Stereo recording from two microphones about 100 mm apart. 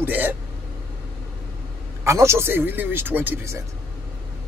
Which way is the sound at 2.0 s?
30° right (ahead or behind).